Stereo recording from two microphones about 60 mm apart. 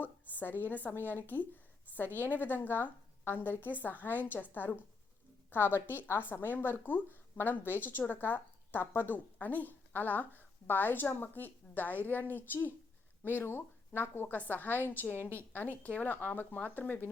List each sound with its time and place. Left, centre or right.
0.0 s a woman's voice: left
5.5 s a woman's voice: left